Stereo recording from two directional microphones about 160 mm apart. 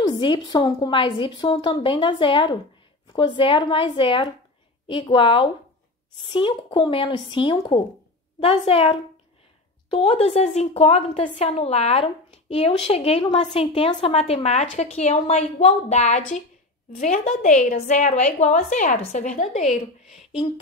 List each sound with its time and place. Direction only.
0.0 s a woman's voice: 25° left (ahead or behind); by 19.7 s 45° left (ahead or behind)
19.7 s a woman's voice: centre (ahead or behind)